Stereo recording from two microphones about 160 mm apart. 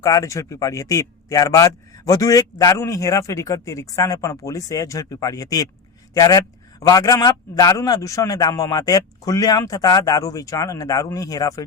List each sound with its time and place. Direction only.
0.0 s a man's voice: 20° left (ahead or behind)